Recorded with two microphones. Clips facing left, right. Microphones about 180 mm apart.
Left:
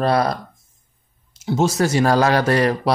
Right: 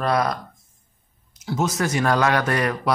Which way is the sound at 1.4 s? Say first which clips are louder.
Left 5 dB; 25° left (ahead or behind).